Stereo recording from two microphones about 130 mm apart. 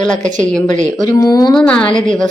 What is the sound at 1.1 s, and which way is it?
Speech, 30° left (ahead or behind).